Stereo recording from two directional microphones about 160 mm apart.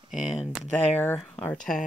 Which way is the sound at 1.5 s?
55° left (ahead or behind).